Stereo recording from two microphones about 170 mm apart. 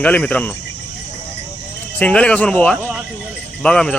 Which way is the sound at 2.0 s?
5° left (ahead or behind).